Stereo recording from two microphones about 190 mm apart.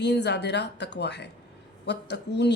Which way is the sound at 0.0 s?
65° left (ahead or behind).